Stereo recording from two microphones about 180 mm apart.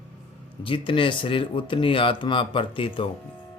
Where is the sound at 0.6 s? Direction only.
30° left (ahead or behind).